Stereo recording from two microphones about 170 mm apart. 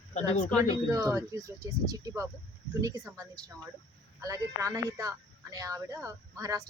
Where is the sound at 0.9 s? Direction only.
20° right (ahead or behind).